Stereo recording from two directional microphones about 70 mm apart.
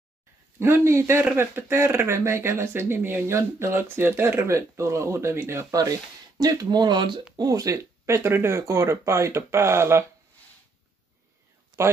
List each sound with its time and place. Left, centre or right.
0.6 s speech: right
5.7 s speech: right
7.3 s speech: right